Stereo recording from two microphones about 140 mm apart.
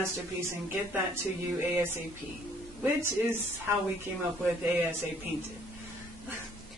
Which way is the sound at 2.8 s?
15° right (ahead or behind).